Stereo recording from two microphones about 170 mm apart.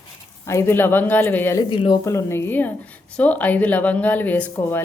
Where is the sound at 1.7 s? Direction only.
25° left (ahead or behind).